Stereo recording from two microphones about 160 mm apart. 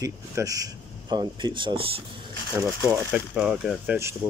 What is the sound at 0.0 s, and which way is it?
Speech, 20° right (ahead or behind).